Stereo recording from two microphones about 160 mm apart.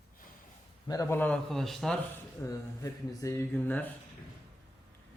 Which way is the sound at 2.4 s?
20° left (ahead or behind).